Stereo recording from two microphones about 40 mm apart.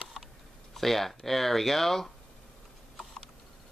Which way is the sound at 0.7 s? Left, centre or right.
Centre.